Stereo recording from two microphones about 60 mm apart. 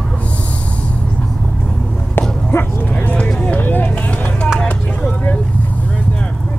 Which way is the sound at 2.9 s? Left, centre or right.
Left.